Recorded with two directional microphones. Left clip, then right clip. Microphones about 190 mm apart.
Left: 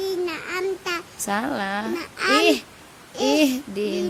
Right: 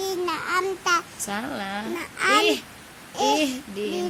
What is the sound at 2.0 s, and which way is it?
Speech, 15° left (ahead or behind).